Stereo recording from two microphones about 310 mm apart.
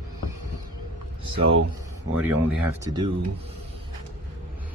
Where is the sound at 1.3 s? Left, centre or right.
Right.